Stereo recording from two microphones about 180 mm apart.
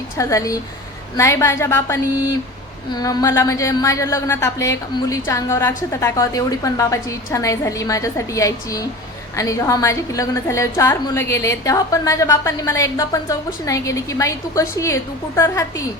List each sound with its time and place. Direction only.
0.2 s a woman's voice: 20° left (ahead or behind)